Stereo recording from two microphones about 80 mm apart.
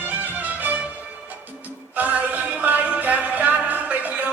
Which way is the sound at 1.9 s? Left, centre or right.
Right.